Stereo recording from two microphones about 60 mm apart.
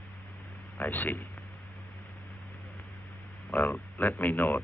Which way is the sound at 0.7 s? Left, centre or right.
Left.